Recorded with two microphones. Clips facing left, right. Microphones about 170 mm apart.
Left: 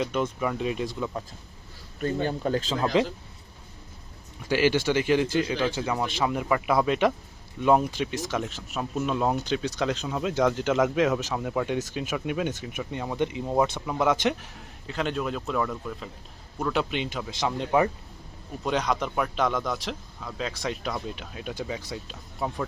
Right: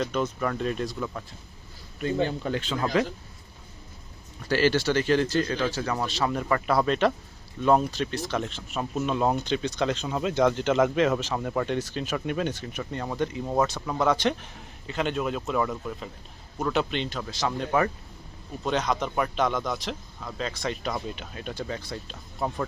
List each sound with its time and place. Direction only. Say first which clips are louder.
0.0 s speech: even; 10° left (ahead or behind)
2.2 s speech: left 1 dB; 40° left (ahead or behind)
2.9 s speech: left 1 dB; 25° left (ahead or behind)
4.4 s speech: even; 15° left (ahead or behind); by 16.8 s 5° right (ahead or behind)
16.9 s speech: even; 10° left (ahead or behind)